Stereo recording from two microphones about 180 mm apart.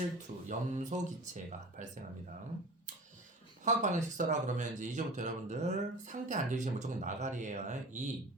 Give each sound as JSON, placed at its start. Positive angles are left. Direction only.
{"t": 0.4, "sound": "speech", "side_deg": -40}
{"t": 3.6, "sound": "speech", "side_deg": -40}